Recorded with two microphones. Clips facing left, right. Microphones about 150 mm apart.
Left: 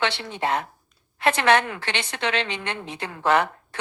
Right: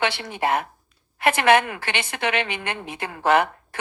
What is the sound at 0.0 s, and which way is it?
A woman's voice, 10° right (ahead or behind).